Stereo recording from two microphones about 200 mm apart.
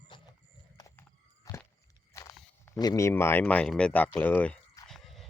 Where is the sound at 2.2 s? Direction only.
15° left (ahead or behind).